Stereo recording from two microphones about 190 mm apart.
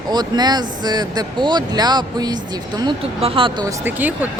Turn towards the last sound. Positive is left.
turn(degrees=-10)  # may be behind; listen again after turning